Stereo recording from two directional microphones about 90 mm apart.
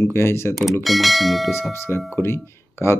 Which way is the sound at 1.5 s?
30° left (ahead or behind).